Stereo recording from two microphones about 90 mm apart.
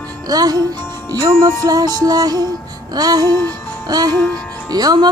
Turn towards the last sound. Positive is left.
turn(degrees=-50)  # may be behind; listen again after turning